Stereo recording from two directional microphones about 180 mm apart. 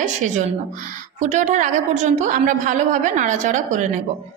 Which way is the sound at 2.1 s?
45° right (ahead or behind).